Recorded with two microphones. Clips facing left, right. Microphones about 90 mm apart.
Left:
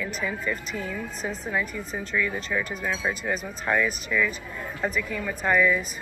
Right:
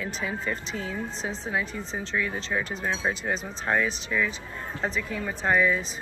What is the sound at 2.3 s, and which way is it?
Speech, 30° right (ahead or behind).